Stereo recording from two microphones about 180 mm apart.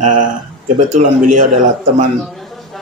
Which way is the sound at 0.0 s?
45° right (ahead or behind).